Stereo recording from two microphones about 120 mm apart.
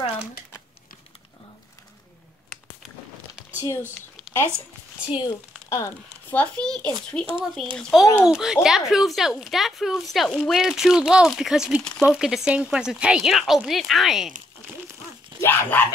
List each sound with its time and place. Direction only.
3.5 s speech: 25° left (ahead or behind)
3.9 s a sound: 20° left (ahead or behind)
5.7 s speech: 25° left (ahead or behind)
6.3 s a child's voice: 10° left (ahead or behind)
15.4 s speech: 15° left (ahead or behind)